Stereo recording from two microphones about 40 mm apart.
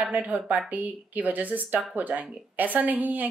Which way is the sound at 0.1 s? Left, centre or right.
Right.